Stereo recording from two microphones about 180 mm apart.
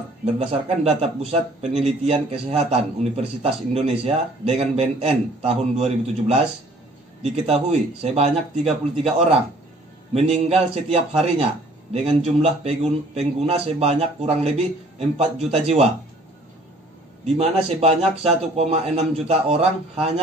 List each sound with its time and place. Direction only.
0.2 s a man's voice: 30° right (ahead or behind)
10.1 s a man's voice: 35° right (ahead or behind)
17.3 s a man's voice: 35° right (ahead or behind)